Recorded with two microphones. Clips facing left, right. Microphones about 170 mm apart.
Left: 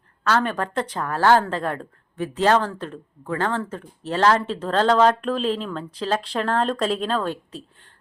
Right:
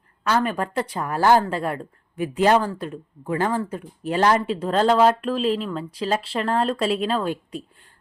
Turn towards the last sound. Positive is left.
turn(degrees=-10)  # may be behind; listen again after turning